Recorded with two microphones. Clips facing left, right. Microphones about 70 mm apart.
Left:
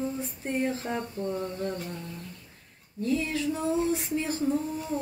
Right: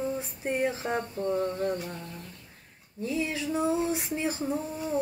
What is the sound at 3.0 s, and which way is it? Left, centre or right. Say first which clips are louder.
Speech: left 2 dB; centre.